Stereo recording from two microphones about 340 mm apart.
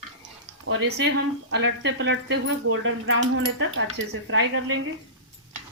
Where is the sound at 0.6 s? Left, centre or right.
Right.